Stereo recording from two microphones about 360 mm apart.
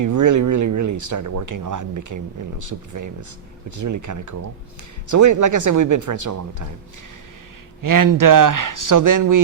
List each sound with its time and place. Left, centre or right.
0.0 s speech: right
7.8 s speech: right